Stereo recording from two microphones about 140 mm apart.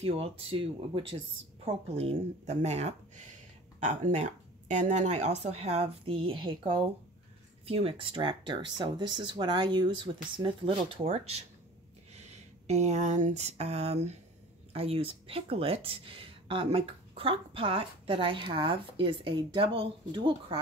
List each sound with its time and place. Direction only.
0.0 s speech: 45° right (ahead or behind)
7.6 s speech: 45° right (ahead or behind)